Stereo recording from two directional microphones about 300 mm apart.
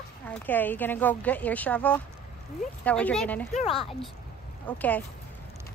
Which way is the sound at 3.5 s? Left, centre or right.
Left.